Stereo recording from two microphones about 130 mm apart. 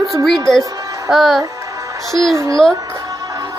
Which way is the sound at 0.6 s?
25° right (ahead or behind).